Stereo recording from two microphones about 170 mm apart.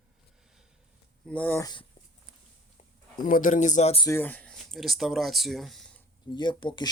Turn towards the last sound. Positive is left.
turn(degrees=25)  # may be behind; listen again after turning